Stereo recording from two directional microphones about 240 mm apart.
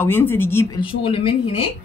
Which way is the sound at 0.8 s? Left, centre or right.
Left.